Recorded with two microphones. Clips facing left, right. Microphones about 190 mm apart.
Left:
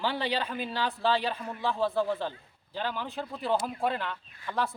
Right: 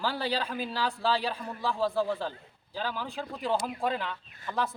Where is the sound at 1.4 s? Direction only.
15° left (ahead or behind).